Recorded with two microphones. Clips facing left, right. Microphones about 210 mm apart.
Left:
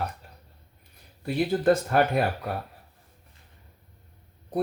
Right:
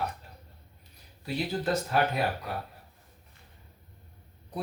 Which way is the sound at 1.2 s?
55° left (ahead or behind).